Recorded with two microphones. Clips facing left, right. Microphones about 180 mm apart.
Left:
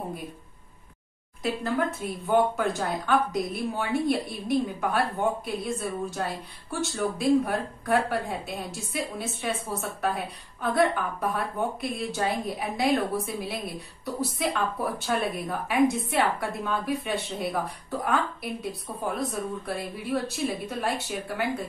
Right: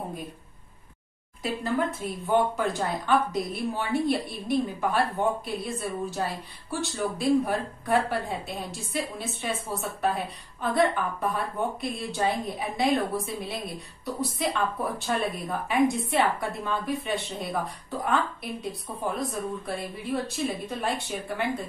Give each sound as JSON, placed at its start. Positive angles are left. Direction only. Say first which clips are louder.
{"t": 1.4, "sound": "speech", "louder": "even", "side_deg": 0}